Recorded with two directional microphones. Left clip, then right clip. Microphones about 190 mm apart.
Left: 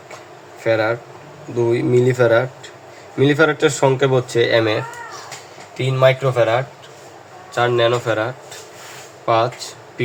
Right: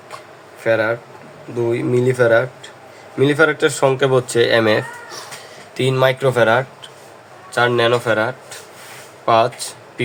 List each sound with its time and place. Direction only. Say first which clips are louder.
0.6 s a man's voice: right 1 dB; 5° right (ahead or behind); by 4.8 s 25° right (ahead or behind)
5.7 s speech: left 1 dB; 45° right (ahead or behind)
7.5 s speech: right 1 dB; 25° right (ahead or behind)